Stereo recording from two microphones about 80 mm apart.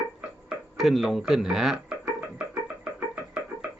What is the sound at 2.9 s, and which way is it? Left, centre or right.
Music, right.